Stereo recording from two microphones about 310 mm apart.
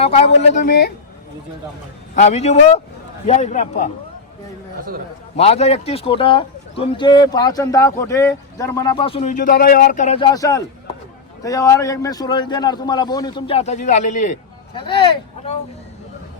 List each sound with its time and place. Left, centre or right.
0.0 s a man's voice: left
2.1 s a man's voice: left
5.4 s speech: centre